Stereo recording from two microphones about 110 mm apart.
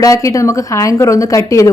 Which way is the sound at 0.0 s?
30° left (ahead or behind).